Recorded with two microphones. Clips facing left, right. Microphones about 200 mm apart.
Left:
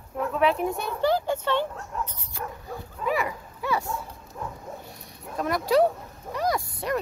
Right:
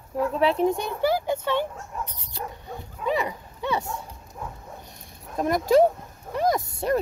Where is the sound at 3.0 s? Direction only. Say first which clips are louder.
Right 1 dB; 20° right (ahead or behind).